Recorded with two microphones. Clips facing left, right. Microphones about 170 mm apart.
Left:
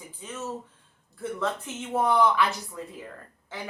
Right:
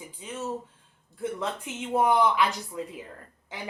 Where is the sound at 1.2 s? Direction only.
15° right (ahead or behind).